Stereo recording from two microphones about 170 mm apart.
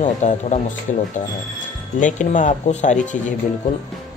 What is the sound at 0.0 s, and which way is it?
Speech, 45° left (ahead or behind).